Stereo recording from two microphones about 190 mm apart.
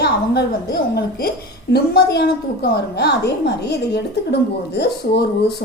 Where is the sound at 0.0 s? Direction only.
60° left (ahead or behind).